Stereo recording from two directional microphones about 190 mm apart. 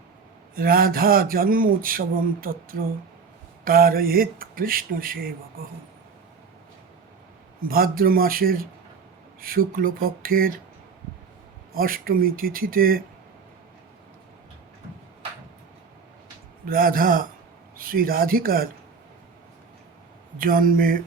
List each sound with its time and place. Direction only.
0.5 s speech: 50° right (ahead or behind)
7.7 s speech: 50° right (ahead or behind)
11.7 s speech: 50° right (ahead or behind)
16.6 s speech: 50° right (ahead or behind)
20.4 s speech: 45° right (ahead or behind)